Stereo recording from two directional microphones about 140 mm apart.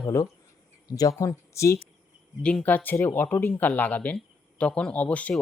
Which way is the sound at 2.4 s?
10° left (ahead or behind).